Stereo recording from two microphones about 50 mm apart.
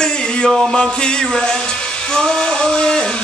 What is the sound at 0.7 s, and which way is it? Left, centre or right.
Music, centre.